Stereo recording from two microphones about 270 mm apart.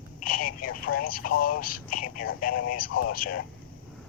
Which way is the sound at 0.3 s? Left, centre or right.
Left.